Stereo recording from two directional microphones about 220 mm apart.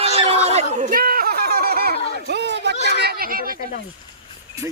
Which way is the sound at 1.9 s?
25° left (ahead or behind).